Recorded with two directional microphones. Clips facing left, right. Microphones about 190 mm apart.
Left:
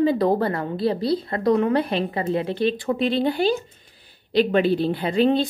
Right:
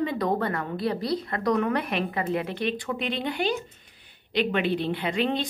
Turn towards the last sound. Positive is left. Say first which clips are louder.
# left 7 dB
turn(degrees=35)  # may be behind; listen again after turning